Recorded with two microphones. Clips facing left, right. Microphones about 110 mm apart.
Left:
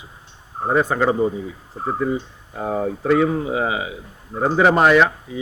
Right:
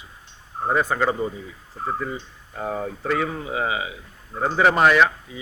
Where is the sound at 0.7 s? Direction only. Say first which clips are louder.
Left 4 dB; 5° left (ahead or behind).